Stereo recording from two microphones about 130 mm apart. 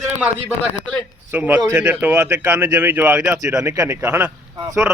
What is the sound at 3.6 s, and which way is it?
Speech, 25° right (ahead or behind).